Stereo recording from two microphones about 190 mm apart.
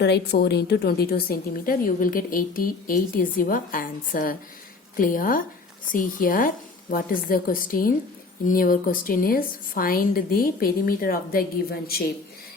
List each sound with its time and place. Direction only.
0.0 s a woman's voice: 60° left (ahead or behind)